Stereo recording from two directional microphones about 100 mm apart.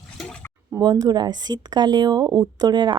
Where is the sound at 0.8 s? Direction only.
40° right (ahead or behind).